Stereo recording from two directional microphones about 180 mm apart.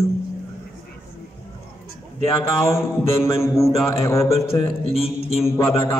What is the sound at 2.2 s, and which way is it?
A woman's voice, 15° left (ahead or behind).